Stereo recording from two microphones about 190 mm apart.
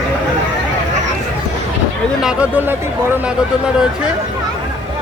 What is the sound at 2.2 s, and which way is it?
Speech, 5° right (ahead or behind).